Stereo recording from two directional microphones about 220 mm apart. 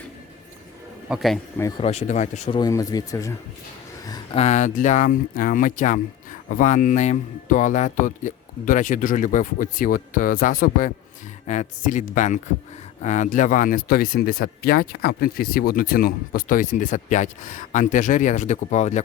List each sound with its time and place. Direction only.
1.0 s speech: centre (ahead or behind)
1.8 s speech: 30° left (ahead or behind)
2.6 s speech: 15° left (ahead or behind)
4.0 s a sound: 15° left (ahead or behind)
4.4 s speech: 30° left (ahead or behind)